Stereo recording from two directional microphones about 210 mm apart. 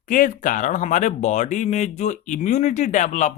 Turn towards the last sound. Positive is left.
turn(degrees=35)  # may be behind; listen again after turning